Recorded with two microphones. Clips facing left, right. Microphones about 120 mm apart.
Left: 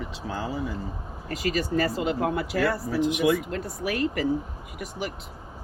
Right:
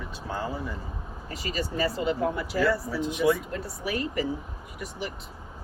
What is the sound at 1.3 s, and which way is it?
Speech, 60° left (ahead or behind).